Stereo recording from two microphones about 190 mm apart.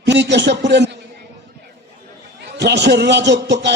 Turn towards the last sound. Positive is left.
turn(degrees=-65)  # may be behind; listen again after turning